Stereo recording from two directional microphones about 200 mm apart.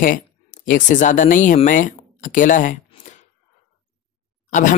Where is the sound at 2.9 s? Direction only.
35° left (ahead or behind).